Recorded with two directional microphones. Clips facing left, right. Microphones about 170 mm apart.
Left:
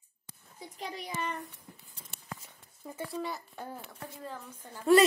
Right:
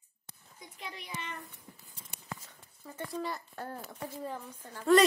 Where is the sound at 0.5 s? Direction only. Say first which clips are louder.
Left 5 dB; 35° left (ahead or behind).